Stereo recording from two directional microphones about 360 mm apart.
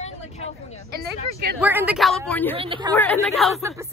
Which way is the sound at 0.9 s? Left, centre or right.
Right.